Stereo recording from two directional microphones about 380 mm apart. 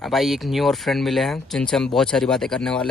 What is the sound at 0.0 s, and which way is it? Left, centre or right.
Speech, centre.